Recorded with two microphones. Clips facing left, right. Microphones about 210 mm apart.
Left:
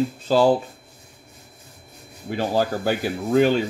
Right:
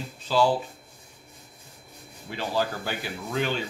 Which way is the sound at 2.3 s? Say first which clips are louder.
Left 6 dB; 45° left (ahead or behind).